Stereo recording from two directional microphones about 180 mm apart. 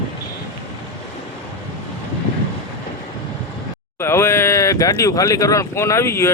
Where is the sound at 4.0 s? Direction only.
15° left (ahead or behind).